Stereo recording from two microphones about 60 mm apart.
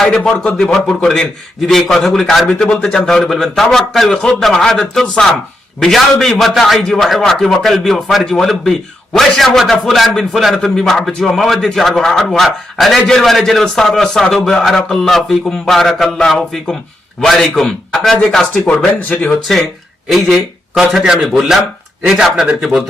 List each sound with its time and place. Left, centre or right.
0.5 s a man's voice: centre
18.7 s speech: left
20.1 s a man's voice: centre
20.7 s a man's voice: centre